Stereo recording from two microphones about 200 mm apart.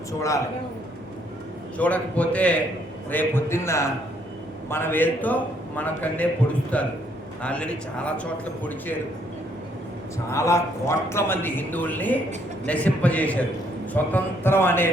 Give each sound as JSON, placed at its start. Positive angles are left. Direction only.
{"t": 0.2, "sound": "a man's voice", "side_deg": 15}
{"t": 1.8, "sound": "a man's voice", "side_deg": 5}
{"t": 10.3, "sound": "a man's voice", "side_deg": 15}